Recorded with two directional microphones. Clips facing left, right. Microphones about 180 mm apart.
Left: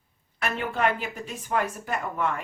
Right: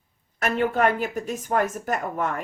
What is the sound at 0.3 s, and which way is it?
A woman's voice, 45° right (ahead or behind).